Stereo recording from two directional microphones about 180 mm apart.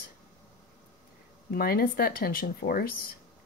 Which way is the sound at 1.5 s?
55° left (ahead or behind).